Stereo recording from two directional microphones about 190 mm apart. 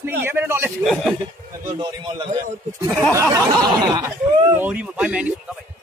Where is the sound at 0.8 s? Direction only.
Centre (ahead or behind).